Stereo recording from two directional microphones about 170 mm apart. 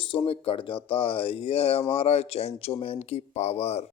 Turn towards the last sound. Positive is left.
turn(degrees=40)  # may be behind; listen again after turning